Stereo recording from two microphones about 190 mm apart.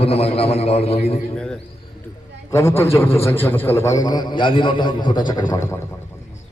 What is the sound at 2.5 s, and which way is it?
A man's voice, 15° left (ahead or behind).